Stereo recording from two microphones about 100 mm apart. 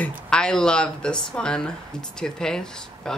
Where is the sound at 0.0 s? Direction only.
10° left (ahead or behind).